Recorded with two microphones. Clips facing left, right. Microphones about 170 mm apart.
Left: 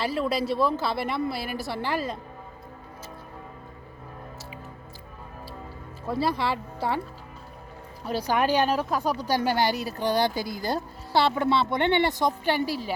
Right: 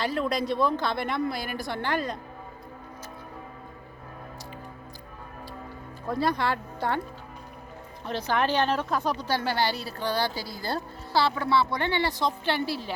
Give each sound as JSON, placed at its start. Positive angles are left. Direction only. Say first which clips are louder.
{"t": 0.0, "sound": "speech", "louder": "left 1 dB", "side_deg": 5}
{"t": 6.1, "sound": "speech", "louder": "even", "side_deg": 5}
{"t": 8.0, "sound": "speech", "louder": "left 2 dB", "side_deg": 10}